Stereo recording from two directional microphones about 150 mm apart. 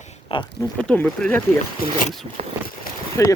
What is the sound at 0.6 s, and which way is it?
Speech, 10° left (ahead or behind).